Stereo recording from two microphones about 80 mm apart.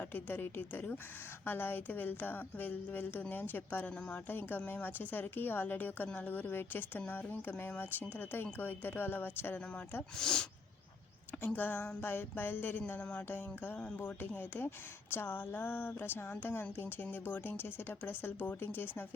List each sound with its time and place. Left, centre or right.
0.0 s a woman's voice: left
10.2 s speech: centre
11.4 s a woman's voice: left